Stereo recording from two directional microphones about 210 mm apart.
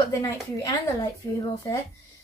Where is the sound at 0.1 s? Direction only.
15° left (ahead or behind).